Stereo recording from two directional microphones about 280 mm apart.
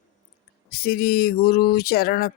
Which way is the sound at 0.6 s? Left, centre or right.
Left.